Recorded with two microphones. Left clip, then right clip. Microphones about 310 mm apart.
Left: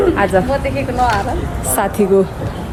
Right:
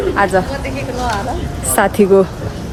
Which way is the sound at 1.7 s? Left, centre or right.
Right.